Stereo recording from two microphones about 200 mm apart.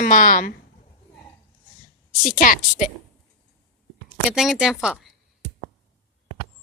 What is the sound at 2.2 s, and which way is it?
Speech, 40° left (ahead or behind).